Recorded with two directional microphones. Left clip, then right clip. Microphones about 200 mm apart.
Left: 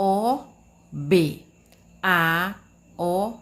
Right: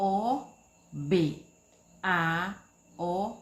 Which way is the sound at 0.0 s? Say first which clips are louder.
Left 6 dB; 45° left (ahead or behind).